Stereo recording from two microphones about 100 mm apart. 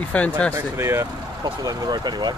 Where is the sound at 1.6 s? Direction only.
40° right (ahead or behind).